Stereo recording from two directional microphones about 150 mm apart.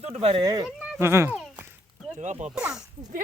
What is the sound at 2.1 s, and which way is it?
Speech, 55° right (ahead or behind).